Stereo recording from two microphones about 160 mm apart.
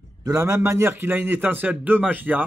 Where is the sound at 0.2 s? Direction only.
20° right (ahead or behind).